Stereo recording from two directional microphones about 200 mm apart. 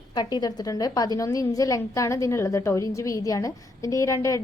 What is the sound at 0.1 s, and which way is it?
A woman's voice, 20° left (ahead or behind).